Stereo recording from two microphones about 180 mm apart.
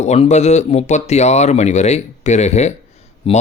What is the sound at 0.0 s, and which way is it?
Speech, 40° left (ahead or behind).